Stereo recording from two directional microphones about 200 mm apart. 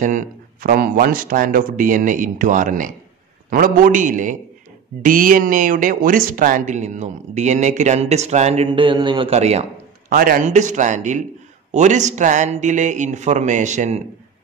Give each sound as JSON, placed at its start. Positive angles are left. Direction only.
{"t": 0.0, "sound": "a man's voice", "side_deg": -40}
{"t": 10.1, "sound": "speech", "side_deg": -45}